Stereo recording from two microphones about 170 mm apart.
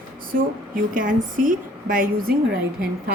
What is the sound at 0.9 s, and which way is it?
A woman's voice, 50° right (ahead or behind).